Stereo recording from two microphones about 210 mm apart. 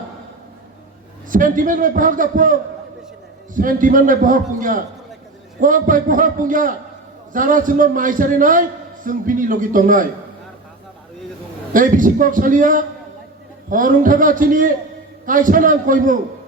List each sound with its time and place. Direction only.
1.3 s a man's voice: 40° right (ahead or behind)
11.7 s a man's voice: 40° right (ahead or behind)